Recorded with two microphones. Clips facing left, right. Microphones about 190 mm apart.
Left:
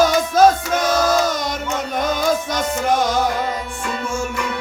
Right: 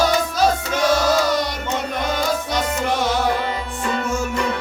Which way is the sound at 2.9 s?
45° left (ahead or behind).